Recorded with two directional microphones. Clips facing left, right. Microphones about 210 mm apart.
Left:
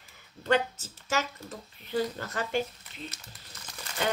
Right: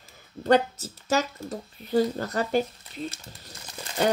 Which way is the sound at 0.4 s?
35° right (ahead or behind).